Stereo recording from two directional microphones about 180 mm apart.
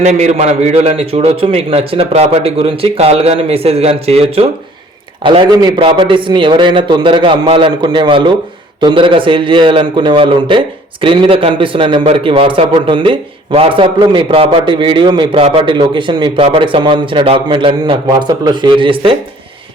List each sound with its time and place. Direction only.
0.0 s a man's voice: 40° right (ahead or behind)